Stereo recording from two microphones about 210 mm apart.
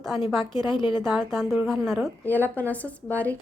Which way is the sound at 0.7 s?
20° left (ahead or behind).